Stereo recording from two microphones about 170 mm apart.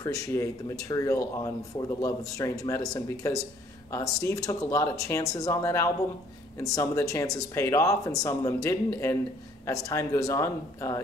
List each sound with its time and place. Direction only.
0.0 s speech: 20° left (ahead or behind)